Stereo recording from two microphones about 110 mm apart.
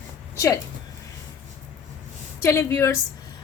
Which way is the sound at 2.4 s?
25° left (ahead or behind).